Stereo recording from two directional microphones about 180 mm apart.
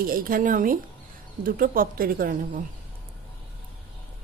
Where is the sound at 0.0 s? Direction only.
50° right (ahead or behind).